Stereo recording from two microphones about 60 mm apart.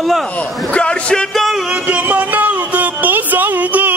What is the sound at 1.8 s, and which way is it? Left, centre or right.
Music, right.